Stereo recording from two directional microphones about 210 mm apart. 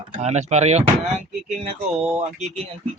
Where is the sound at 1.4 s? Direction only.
30° right (ahead or behind).